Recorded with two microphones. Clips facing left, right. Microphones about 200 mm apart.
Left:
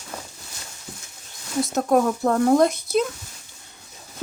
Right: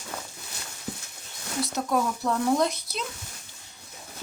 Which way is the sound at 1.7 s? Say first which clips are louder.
Left 8 dB; 50° left (ahead or behind).